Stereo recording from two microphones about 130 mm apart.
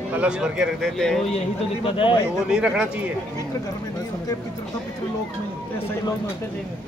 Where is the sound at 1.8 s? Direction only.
40° left (ahead or behind).